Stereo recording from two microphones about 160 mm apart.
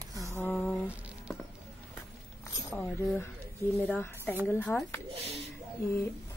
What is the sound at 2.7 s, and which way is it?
Speech, 10° left (ahead or behind).